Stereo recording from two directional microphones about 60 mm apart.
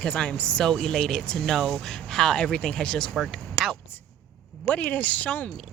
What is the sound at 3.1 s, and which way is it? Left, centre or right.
Speech, centre.